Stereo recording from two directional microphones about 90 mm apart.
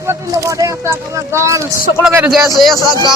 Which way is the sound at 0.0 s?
35° right (ahead or behind).